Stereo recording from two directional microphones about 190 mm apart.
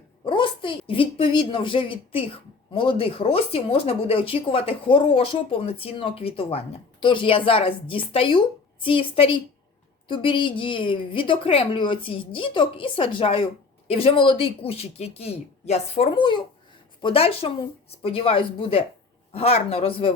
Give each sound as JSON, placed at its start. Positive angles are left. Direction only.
{"t": 0.3, "sound": "a woman's voice", "side_deg": 25}